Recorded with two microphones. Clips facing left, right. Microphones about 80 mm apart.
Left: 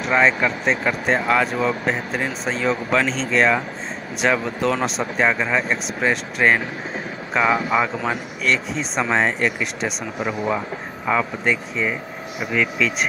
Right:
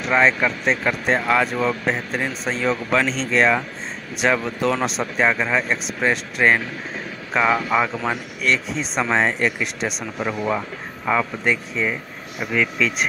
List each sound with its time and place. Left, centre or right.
0.0 s speech: centre